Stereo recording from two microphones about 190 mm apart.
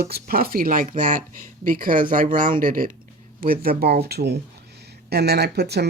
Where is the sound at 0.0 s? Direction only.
55° right (ahead or behind).